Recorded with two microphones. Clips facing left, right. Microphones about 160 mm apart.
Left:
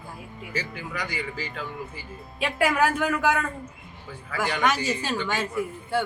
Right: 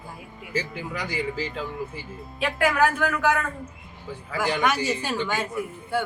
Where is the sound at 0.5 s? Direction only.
25° right (ahead or behind).